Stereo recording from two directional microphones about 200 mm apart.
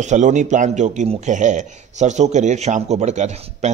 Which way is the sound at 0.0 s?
35° right (ahead or behind).